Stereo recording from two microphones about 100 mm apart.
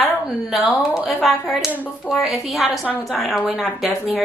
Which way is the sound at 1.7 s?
15° left (ahead or behind).